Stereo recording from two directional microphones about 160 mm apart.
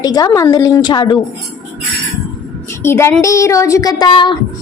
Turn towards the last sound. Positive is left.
turn(degrees=30)  # may be behind; listen again after turning